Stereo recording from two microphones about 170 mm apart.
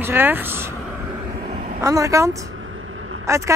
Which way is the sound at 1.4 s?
45° right (ahead or behind).